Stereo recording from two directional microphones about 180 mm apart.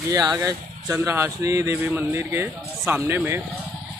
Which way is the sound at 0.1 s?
20° right (ahead or behind).